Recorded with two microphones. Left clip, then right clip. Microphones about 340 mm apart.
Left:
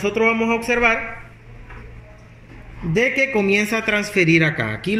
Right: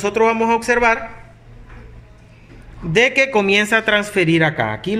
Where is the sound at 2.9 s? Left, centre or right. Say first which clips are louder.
Right 4 dB; right.